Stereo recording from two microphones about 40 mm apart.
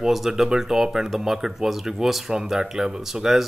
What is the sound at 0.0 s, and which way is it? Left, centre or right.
Speech, centre.